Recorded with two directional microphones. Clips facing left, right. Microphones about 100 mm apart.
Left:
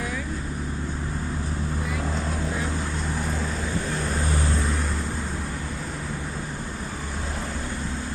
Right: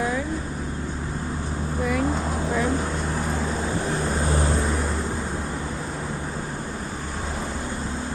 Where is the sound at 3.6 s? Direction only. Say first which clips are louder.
Right 3 dB; 30° right (ahead or behind).